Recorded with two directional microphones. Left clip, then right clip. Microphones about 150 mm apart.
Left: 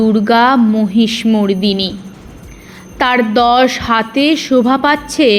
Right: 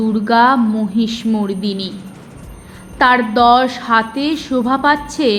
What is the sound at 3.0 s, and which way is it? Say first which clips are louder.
A woman's voice: even; 30° left (ahead or behind).